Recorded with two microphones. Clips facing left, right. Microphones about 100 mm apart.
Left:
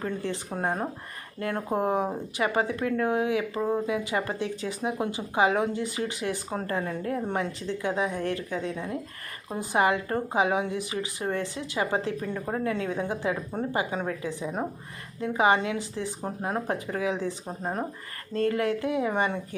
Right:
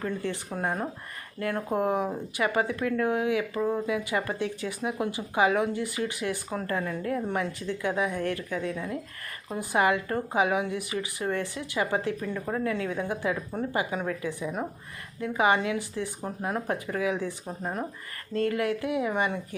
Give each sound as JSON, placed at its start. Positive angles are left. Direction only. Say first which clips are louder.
{"t": 0.3, "sound": "a woman's voice", "louder": "left 1 dB", "side_deg": 30}